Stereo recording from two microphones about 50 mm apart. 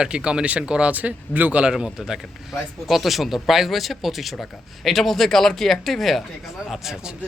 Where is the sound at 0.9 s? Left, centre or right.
Right.